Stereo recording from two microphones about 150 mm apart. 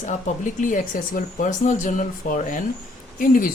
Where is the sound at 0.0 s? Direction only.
55° left (ahead or behind).